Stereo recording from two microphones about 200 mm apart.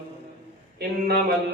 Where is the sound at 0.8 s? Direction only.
50° right (ahead or behind).